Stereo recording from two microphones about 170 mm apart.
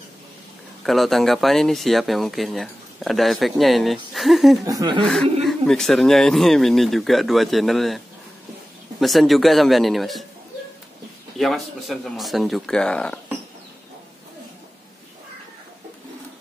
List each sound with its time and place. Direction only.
0.8 s speech: centre (ahead or behind)
4.6 s speech: 25° right (ahead or behind)
5.0 s speech: 5° left (ahead or behind)
9.0 s speech: centre (ahead or behind)
11.3 s speech: centre (ahead or behind)